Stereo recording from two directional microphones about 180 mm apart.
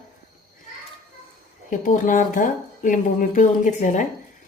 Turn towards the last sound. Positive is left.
turn(degrees=40)  # may be behind; listen again after turning